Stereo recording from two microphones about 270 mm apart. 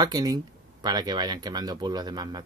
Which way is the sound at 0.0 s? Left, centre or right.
Centre.